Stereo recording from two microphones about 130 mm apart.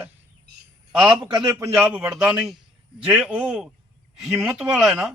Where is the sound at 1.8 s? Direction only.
10° right (ahead or behind).